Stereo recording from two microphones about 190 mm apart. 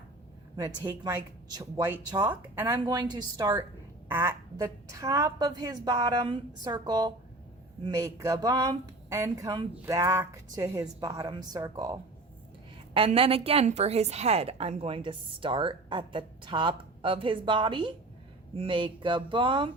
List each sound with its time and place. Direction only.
0.5 s a woman's voice: 20° right (ahead or behind)